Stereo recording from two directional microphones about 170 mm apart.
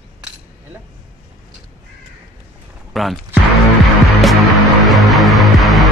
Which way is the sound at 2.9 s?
Centre (ahead or behind).